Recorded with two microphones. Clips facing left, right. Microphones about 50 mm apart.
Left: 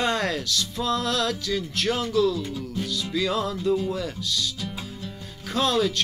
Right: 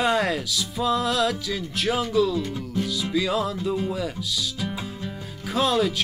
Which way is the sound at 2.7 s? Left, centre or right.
Centre.